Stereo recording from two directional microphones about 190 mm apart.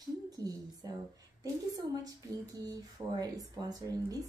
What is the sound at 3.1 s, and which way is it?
Speech, 20° right (ahead or behind).